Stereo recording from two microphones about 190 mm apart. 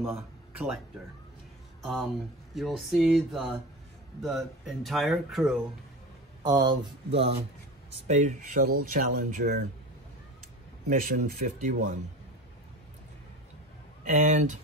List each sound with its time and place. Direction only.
1.8 s speech: centre (ahead or behind)
6.4 s speech: 25° right (ahead or behind); by 9.5 s 45° right (ahead or behind)
10.9 s speech: 45° right (ahead or behind)
14.0 s speech: 40° right (ahead or behind)